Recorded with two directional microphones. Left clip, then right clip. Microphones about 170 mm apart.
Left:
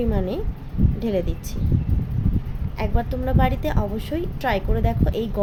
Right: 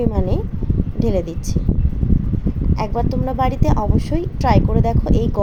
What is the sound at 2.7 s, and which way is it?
A woman's voice, 20° right (ahead or behind).